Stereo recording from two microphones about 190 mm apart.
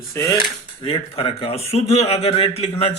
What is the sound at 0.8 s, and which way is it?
Speech, 30° left (ahead or behind).